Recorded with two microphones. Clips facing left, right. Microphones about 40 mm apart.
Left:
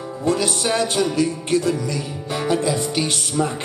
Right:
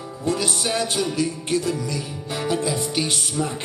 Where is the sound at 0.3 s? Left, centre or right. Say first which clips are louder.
Left 3 dB; centre.